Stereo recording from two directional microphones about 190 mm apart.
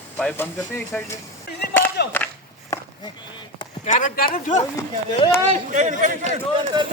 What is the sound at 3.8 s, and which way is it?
Speech, 45° left (ahead or behind).